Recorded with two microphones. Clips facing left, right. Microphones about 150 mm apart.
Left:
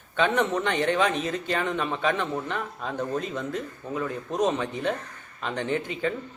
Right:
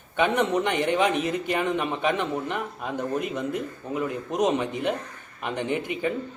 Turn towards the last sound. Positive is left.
turn(degrees=-15)  # may be behind; listen again after turning